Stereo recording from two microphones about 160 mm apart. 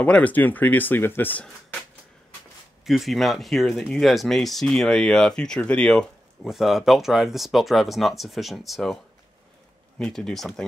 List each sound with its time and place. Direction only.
0.0 s speech: 10° left (ahead or behind)
2.8 s speech: centre (ahead or behind)
9.9 s speech: 5° left (ahead or behind)